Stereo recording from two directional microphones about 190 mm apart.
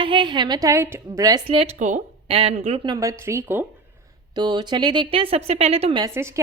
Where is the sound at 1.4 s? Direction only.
30° right (ahead or behind).